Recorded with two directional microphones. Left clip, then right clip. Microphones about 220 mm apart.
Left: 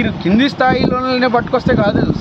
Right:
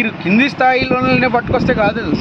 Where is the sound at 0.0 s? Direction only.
20° left (ahead or behind).